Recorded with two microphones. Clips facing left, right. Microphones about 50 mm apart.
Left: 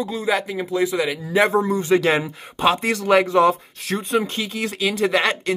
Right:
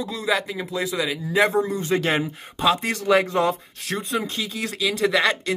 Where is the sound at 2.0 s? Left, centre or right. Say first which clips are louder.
Left 3 dB; left.